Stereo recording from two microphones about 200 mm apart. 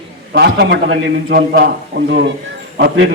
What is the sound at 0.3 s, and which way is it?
A man's voice, 55° right (ahead or behind).